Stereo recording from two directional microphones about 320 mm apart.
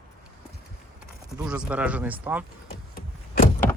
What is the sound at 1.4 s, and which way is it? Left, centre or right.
Speech, centre.